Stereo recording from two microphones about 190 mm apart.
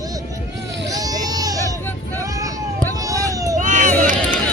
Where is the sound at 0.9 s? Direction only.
20° right (ahead or behind).